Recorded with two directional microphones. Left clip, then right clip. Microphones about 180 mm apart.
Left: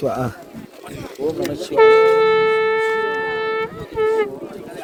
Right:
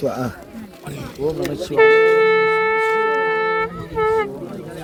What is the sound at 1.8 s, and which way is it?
Wind instrument, 85° left.